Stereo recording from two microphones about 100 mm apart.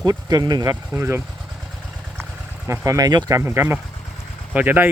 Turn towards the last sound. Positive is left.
turn(degrees=-20)  # may be behind; listen again after turning